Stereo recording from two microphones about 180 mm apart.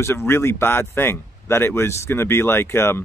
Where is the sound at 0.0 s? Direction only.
15° left (ahead or behind).